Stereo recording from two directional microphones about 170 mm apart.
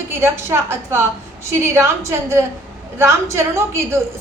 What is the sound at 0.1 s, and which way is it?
A woman's voice, 15° right (ahead or behind).